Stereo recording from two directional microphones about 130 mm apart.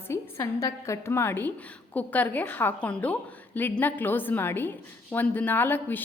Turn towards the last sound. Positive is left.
turn(degrees=15)  # may be behind; listen again after turning